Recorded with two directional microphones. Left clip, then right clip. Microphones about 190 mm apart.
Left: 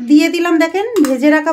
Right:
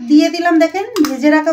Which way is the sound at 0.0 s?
45° left (ahead or behind).